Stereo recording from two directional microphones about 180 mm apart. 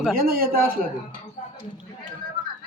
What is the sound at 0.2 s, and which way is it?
Speech, 55° right (ahead or behind).